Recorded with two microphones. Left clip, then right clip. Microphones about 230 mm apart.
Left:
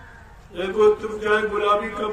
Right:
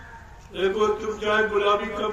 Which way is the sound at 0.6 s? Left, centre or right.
Left.